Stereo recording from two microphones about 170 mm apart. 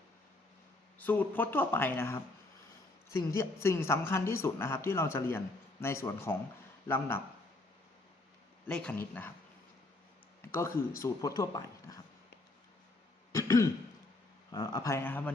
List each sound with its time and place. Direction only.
0.9 s speech: 10° left (ahead or behind)
8.6 s speech: 5° left (ahead or behind)
10.4 s speech: 15° left (ahead or behind)
13.3 s throat clearing: 20° left (ahead or behind)
14.5 s speech: 20° left (ahead or behind)